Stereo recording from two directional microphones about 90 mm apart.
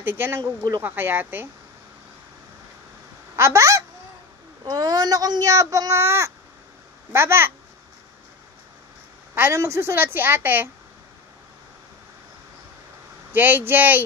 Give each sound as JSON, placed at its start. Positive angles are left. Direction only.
{"t": 0.0, "sound": "a woman's voice", "side_deg": -25}
{"t": 3.3, "sound": "a woman's voice", "side_deg": -35}
{"t": 9.3, "sound": "a woman's voice", "side_deg": -30}
{"t": 13.3, "sound": "a woman's voice", "side_deg": -20}